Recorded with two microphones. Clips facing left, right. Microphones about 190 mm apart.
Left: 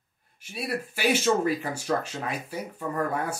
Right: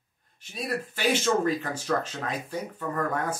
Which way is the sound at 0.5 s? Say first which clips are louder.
Even; 10° left (ahead or behind).